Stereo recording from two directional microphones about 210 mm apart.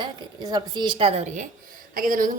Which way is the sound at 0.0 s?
20° right (ahead or behind).